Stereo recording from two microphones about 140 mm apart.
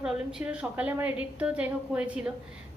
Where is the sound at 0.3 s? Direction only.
5° right (ahead or behind).